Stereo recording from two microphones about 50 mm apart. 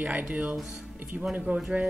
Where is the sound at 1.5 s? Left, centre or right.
Right.